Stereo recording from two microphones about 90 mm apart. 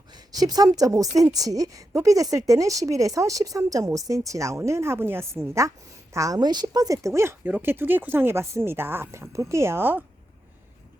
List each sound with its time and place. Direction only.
0.3 s a woman's voice: 45° right (ahead or behind); by 10.0 s 25° right (ahead or behind)